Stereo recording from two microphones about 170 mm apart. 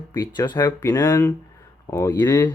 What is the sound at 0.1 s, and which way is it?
Speech, 25° left (ahead or behind).